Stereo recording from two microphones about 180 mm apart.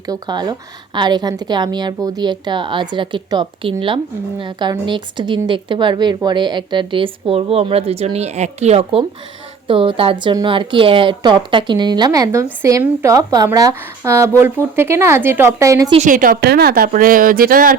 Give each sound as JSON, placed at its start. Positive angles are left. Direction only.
{"t": 0.1, "sound": "a woman's voice", "side_deg": -25}
{"t": 16.0, "sound": "speech", "side_deg": -50}